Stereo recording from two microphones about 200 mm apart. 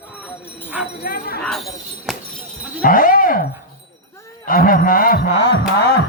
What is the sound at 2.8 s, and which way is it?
Speech, 45° left (ahead or behind).